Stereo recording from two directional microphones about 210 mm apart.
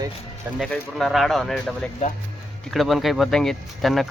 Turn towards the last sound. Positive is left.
turn(degrees=0)  # may be behind; listen again after turning